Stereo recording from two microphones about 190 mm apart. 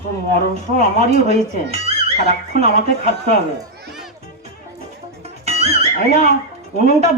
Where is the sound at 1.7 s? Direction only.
35° right (ahead or behind).